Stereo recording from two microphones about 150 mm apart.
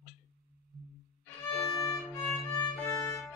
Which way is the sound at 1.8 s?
15° left (ahead or behind).